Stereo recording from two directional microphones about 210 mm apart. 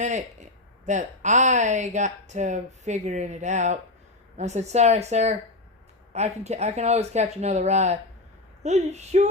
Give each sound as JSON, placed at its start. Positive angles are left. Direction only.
{"t": 0.0, "sound": "speech", "side_deg": -35}